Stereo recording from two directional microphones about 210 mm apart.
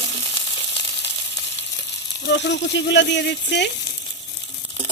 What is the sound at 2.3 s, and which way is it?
Speech, 55° left (ahead or behind).